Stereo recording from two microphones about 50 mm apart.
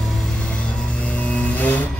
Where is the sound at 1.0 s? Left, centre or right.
Left.